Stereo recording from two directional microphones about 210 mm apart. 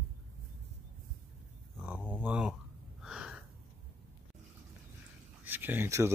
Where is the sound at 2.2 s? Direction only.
5° right (ahead or behind).